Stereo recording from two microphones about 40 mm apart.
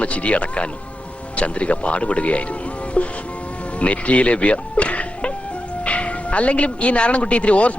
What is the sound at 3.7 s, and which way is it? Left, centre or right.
Music, left.